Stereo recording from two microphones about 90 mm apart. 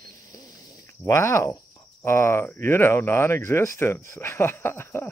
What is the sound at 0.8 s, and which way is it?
Speech, 30° left (ahead or behind).